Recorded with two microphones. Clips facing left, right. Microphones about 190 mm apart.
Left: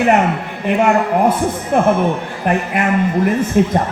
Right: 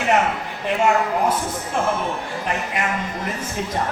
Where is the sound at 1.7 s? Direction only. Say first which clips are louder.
Left 9 dB; 60° left (ahead or behind).